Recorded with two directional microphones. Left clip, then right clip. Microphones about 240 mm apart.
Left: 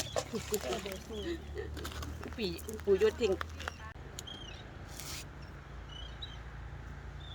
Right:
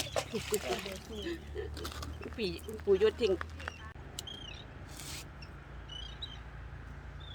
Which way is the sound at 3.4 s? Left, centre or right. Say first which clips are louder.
Left 1 dB; left.